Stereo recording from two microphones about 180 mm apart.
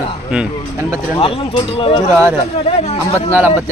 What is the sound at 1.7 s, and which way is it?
Speech, 30° left (ahead or behind).